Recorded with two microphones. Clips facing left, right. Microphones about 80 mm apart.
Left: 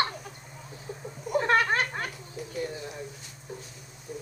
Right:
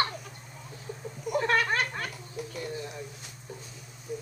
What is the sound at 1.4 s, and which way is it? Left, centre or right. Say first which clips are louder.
Cat: left 2 dB; left.